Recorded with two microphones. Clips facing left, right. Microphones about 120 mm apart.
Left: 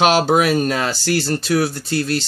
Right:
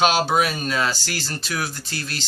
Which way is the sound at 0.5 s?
50° left (ahead or behind).